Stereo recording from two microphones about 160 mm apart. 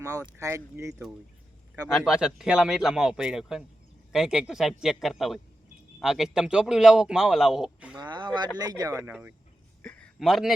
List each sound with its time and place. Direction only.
0.3 s speech: 15° right (ahead or behind)
1.9 s a man's voice: centre (ahead or behind)
7.9 s speech: 25° right (ahead or behind)
9.8 s a sound: 10° left (ahead or behind)
10.2 s a man's voice: centre (ahead or behind)